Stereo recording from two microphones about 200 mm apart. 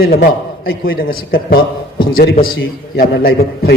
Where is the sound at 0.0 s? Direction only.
50° left (ahead or behind).